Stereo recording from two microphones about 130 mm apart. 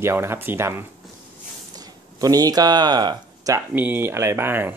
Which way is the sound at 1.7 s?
30° right (ahead or behind).